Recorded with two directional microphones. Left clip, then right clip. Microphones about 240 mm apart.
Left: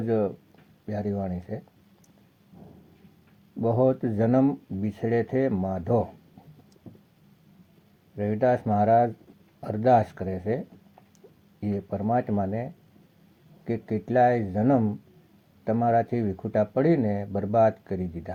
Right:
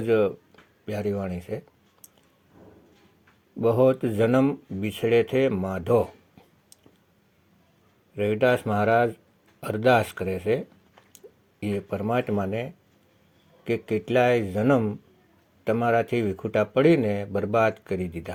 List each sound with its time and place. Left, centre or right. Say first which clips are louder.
0.0 s speech: right 4 dB; right
3.6 s speech: right 3 dB; right
8.1 s speech: right 2 dB; right
11.6 s speech: right 2 dB; right
13.7 s speech: right 4 dB; right